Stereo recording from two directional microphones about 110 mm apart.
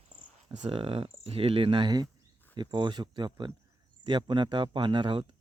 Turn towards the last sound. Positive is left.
turn(degrees=-45)  # may be behind; listen again after turning